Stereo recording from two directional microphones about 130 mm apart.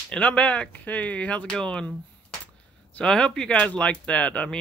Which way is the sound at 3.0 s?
5° left (ahead or behind).